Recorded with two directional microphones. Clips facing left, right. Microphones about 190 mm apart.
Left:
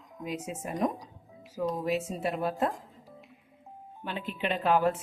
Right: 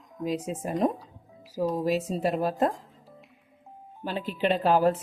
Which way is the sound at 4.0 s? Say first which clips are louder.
Right 6 dB; 35° right (ahead or behind).